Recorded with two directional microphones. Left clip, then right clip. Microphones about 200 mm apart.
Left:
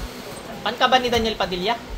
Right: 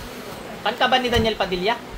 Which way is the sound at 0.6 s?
20° right (ahead or behind).